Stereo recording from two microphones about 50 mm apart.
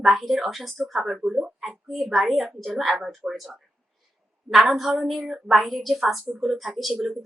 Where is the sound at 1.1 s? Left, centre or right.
Centre.